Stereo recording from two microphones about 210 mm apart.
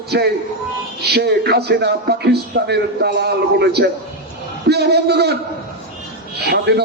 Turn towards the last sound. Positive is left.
turn(degrees=-50)  # may be behind; listen again after turning